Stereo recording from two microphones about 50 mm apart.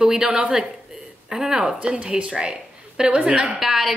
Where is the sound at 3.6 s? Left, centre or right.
Centre.